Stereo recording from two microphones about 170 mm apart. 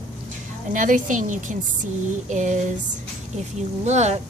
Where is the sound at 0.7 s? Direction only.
50° right (ahead or behind).